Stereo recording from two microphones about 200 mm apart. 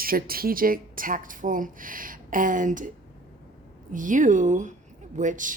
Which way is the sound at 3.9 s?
40° right (ahead or behind).